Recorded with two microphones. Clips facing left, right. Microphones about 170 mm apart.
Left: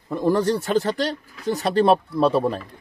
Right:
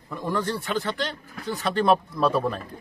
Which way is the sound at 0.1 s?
40° left (ahead or behind).